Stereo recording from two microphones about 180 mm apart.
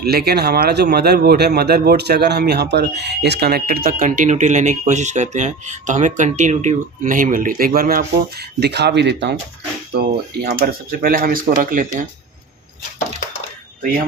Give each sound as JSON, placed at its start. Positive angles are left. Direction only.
{"t": 0.0, "sound": "speech", "side_deg": -60}